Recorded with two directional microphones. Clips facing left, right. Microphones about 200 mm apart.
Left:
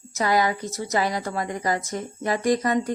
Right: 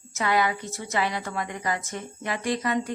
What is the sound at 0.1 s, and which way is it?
A woman's voice, 40° left (ahead or behind).